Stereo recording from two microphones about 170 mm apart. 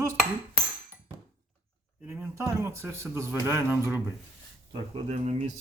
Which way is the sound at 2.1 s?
15° right (ahead or behind).